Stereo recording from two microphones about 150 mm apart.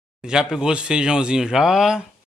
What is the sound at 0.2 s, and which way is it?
Speech, 5° right (ahead or behind).